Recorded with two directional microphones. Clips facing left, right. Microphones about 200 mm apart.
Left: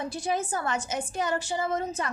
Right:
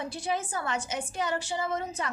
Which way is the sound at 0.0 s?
45° left (ahead or behind).